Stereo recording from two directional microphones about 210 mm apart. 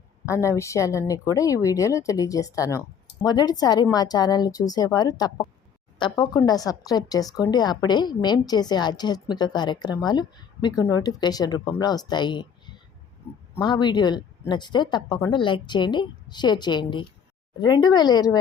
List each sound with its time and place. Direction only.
0.3 s a woman's voice: 15° left (ahead or behind)